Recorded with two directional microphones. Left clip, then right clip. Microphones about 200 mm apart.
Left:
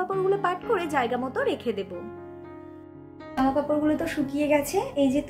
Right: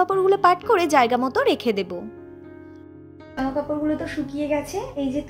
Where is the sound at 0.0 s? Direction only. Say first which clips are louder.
Right 7 dB; 45° right (ahead or behind).